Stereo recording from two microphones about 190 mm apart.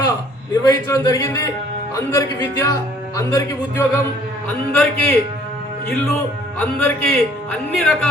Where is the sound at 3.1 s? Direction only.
15° left (ahead or behind).